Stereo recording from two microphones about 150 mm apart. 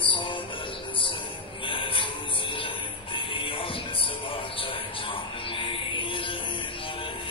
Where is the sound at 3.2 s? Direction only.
35° left (ahead or behind).